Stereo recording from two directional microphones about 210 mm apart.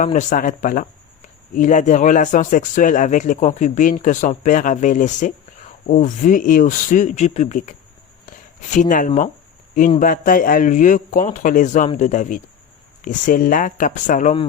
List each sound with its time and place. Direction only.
0.0 s speech: 35° left (ahead or behind)